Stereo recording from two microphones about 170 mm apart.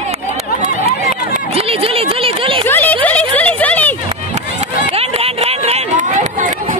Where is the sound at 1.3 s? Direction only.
35° right (ahead or behind).